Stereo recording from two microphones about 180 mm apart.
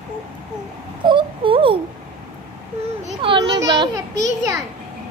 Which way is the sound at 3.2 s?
30° right (ahead or behind).